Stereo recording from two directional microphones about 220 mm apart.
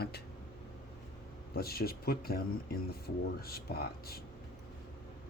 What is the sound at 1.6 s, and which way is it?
Speech, 45° left (ahead or behind).